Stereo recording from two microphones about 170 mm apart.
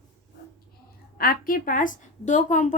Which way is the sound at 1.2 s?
55° left (ahead or behind).